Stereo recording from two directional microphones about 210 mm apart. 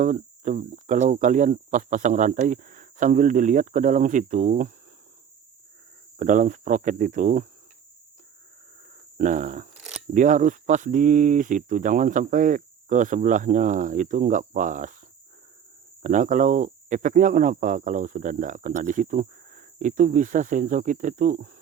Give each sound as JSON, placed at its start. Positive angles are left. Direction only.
{"t": 0.0, "sound": "speech", "side_deg": -35}
{"t": 6.1, "sound": "speech", "side_deg": -35}
{"t": 9.1, "sound": "speech", "side_deg": -35}
{"t": 16.0, "sound": "speech", "side_deg": -35}